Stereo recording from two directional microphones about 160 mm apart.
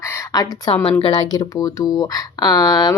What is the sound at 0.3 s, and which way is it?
Speech, 25° left (ahead or behind).